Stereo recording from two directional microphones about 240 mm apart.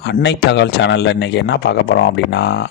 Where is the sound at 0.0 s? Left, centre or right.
Left.